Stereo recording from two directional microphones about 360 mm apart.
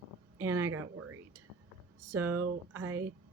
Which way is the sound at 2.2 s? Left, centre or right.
Right.